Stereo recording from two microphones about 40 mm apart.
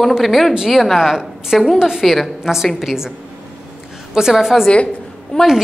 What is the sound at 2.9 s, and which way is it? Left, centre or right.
Speech, centre.